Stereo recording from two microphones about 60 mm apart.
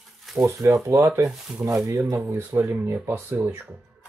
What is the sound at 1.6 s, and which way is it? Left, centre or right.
Speech, right.